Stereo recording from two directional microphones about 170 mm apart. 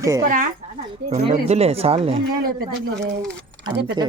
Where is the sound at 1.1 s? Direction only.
40° right (ahead or behind).